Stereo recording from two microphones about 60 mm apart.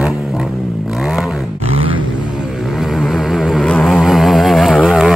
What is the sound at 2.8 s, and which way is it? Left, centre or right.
Vehicle, centre.